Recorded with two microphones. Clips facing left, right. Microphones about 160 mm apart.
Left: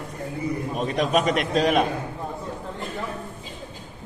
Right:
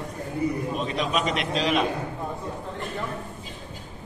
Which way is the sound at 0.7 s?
50° left (ahead or behind).